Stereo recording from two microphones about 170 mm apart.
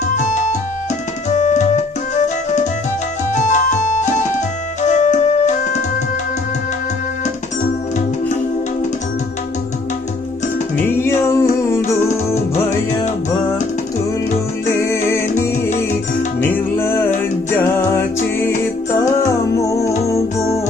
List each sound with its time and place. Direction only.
0.2 s music: 45° left (ahead or behind)
10.8 s music: 15° left (ahead or behind)
14.8 s music: 15° left (ahead or behind)
19.5 s music: 20° left (ahead or behind)